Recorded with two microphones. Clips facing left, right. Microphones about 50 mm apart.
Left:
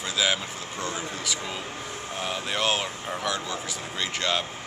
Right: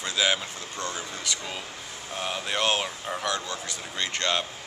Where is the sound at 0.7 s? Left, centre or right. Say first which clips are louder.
Left 2 dB; centre.